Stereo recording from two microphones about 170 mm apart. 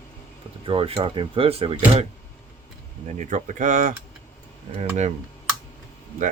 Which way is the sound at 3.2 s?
45° right (ahead or behind).